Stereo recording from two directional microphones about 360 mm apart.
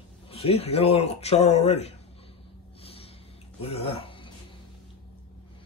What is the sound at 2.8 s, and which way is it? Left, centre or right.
Snort, centre.